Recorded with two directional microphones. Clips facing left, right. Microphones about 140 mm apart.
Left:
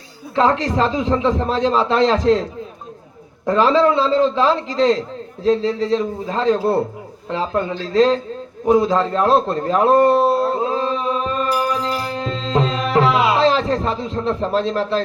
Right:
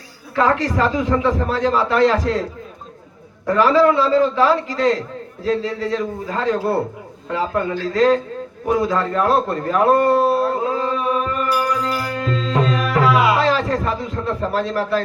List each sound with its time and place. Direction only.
0.3 s a man's voice: 25° left (ahead or behind)
3.4 s a man's voice: 25° left (ahead or behind)
8.6 s a sound: 25° left (ahead or behind)